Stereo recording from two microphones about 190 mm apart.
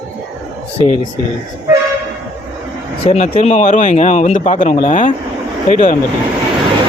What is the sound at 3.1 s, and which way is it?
A man's voice, 35° left (ahead or behind).